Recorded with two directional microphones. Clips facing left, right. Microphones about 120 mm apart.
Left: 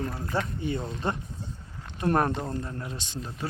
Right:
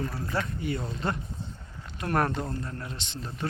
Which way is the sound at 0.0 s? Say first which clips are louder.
Left 1 dB; 20° left (ahead or behind).